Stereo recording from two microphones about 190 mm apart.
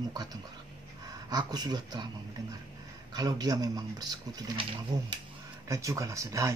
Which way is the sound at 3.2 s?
20° right (ahead or behind).